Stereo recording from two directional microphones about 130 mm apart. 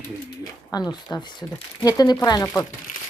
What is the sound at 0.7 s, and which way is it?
Speech, 25° left (ahead or behind).